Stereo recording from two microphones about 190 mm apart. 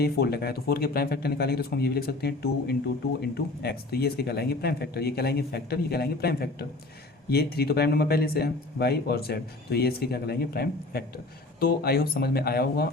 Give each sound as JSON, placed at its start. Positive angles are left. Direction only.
{"t": 0.0, "sound": "speech", "side_deg": 55}